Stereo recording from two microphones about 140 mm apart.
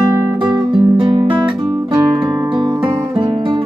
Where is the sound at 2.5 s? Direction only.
35° right (ahead or behind).